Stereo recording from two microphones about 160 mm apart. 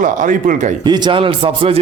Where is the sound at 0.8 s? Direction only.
30° right (ahead or behind).